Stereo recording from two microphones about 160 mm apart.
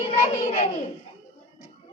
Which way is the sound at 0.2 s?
40° left (ahead or behind).